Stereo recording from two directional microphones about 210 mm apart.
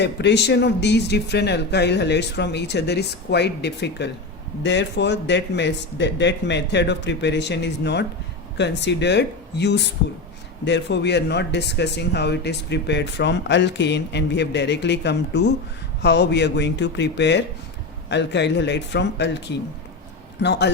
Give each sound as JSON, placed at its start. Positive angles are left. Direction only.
{"t": 0.0, "sound": "speech", "side_deg": 55}
{"t": 20.4, "sound": "speech", "side_deg": 55}